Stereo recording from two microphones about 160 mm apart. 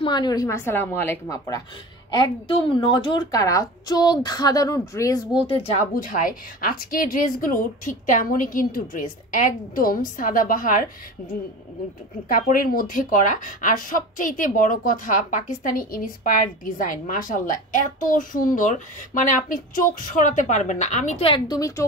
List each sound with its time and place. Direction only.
0.0 s speech: 25° left (ahead or behind)
2.0 s speech: 30° left (ahead or behind)
5.9 s speech: 60° left (ahead or behind)
12.3 s speech: 60° left (ahead or behind); by 21.4 s 40° left (ahead or behind)
21.5 s speech: 20° left (ahead or behind)